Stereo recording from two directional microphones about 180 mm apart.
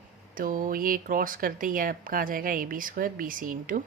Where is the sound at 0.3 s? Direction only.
50° right (ahead or behind).